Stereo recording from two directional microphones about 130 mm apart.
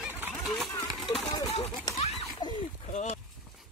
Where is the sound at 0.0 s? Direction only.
15° right (ahead or behind).